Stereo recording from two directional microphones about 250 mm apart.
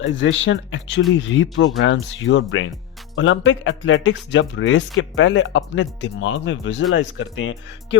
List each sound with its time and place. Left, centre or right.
0.0 s a man's voice: left